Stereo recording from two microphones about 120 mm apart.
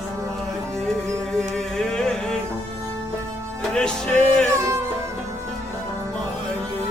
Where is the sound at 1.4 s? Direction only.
5° left (ahead or behind).